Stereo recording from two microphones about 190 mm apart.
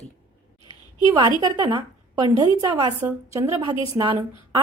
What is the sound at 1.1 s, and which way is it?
A woman's voice, 20° right (ahead or behind).